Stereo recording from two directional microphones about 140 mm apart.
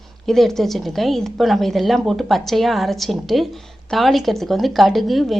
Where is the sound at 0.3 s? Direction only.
Centre (ahead or behind).